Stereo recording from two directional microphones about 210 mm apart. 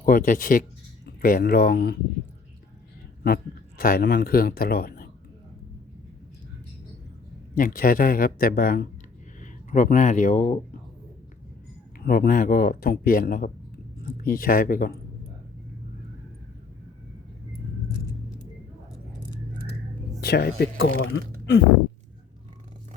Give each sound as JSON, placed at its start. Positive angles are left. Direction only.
{"t": 0.0, "sound": "speech", "side_deg": 40}
{"t": 3.2, "sound": "speech", "side_deg": 45}
{"t": 7.5, "sound": "speech", "side_deg": 40}
{"t": 11.9, "sound": "speech", "side_deg": 45}
{"t": 20.2, "sound": "speech", "side_deg": 50}